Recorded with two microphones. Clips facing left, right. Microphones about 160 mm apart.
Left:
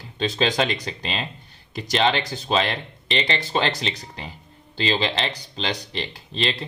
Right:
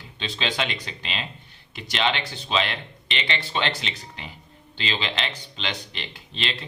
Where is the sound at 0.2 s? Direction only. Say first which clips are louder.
Left 6 dB; 45° left (ahead or behind).